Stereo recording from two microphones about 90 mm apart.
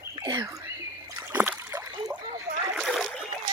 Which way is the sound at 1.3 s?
20° right (ahead or behind).